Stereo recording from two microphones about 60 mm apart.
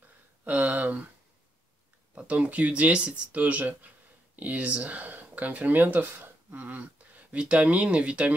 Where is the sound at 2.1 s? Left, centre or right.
Right.